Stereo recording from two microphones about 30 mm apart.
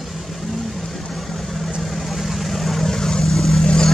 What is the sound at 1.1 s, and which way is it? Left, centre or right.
Vehicle, centre.